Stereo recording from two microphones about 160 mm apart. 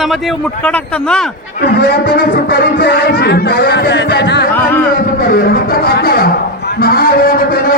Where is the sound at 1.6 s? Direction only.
85° left.